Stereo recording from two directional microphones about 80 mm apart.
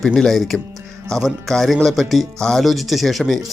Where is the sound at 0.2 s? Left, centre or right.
Centre.